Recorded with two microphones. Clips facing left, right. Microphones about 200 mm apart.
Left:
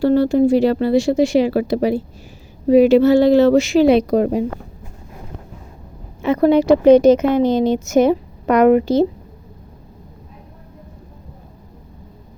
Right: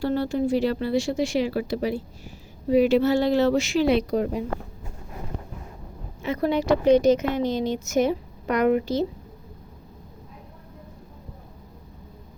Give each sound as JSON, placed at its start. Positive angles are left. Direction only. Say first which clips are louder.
{"t": 0.0, "sound": "speech", "louder": "left 10 dB", "side_deg": 85}
{"t": 6.2, "sound": "a woman's voice", "louder": "left 10 dB", "side_deg": 75}